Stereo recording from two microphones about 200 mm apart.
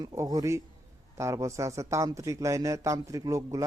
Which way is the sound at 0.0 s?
20° right (ahead or behind).